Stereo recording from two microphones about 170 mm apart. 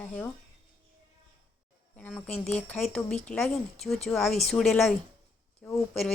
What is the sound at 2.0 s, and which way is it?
A woman's voice, 5° left (ahead or behind).